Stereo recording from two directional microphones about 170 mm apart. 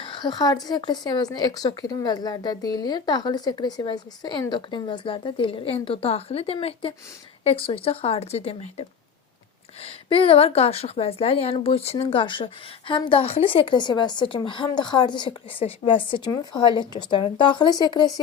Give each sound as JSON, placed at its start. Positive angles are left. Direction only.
{"t": 0.0, "sound": "a woman's voice", "side_deg": 30}
{"t": 9.8, "sound": "a woman's voice", "side_deg": 30}